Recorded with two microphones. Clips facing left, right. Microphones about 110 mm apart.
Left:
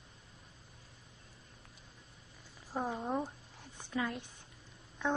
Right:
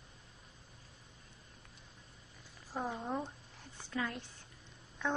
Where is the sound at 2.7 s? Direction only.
10° left (ahead or behind).